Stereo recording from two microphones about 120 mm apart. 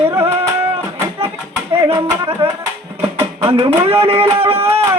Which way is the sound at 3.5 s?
50° right (ahead or behind).